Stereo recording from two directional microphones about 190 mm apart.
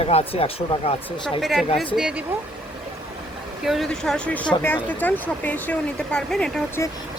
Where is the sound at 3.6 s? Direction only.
Centre (ahead or behind).